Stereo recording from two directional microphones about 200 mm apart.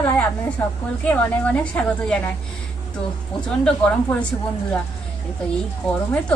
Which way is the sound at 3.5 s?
5° left (ahead or behind).